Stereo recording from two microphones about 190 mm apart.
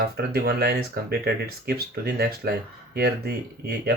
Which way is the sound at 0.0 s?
55° right (ahead or behind).